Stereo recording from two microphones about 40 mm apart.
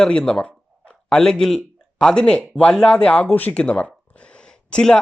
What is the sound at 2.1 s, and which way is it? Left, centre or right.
Speech, left.